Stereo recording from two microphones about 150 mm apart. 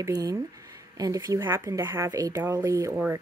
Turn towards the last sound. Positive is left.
turn(degrees=-15)  # may be behind; listen again after turning